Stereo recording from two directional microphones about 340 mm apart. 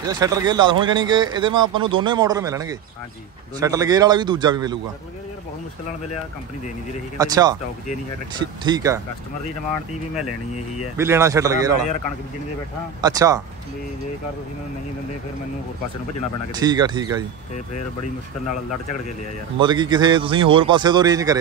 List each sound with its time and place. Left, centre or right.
0.0 s speech: centre
7.2 s speech: centre
11.0 s speech: centre
13.0 s speech: centre
16.5 s speech: centre
18.5 s speech: left
19.6 s speech: centre